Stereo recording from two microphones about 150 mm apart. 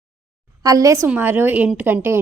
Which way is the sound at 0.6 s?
20° right (ahead or behind).